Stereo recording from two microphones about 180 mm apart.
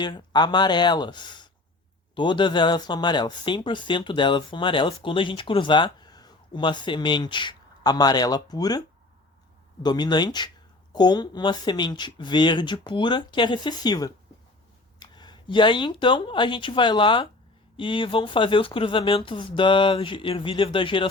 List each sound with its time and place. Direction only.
0.0 s speech: 25° left (ahead or behind)
9.8 s speech: 25° left (ahead or behind)